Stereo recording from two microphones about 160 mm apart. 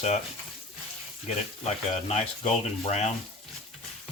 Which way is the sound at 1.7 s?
45° left (ahead or behind).